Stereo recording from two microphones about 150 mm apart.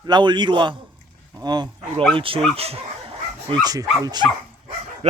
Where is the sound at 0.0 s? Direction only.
30° right (ahead or behind).